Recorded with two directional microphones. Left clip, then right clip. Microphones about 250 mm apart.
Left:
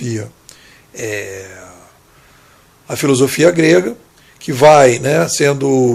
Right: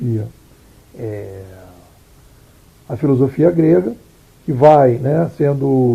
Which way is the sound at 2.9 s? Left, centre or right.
Left.